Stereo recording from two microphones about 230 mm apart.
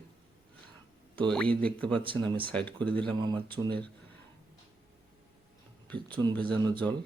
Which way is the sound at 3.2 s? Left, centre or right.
Centre.